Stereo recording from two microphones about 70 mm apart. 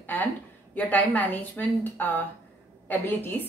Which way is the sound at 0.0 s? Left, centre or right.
Left.